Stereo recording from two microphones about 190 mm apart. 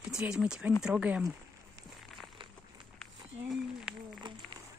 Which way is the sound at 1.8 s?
Centre (ahead or behind).